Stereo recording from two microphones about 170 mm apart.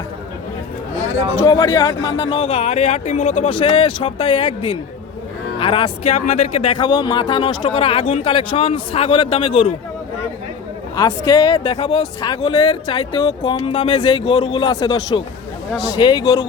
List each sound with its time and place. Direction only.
1.4 s speech: 20° left (ahead or behind)
2.4 s speech: 40° left (ahead or behind)
10.9 s speech: 20° left (ahead or behind)